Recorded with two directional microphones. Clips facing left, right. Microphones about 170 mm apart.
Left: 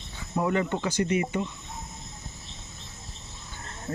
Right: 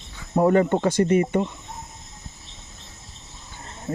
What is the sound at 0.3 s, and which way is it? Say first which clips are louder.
Speech: right 8 dB; 45° right (ahead or behind).